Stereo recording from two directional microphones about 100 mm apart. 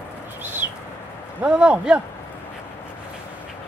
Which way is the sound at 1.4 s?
10° right (ahead or behind).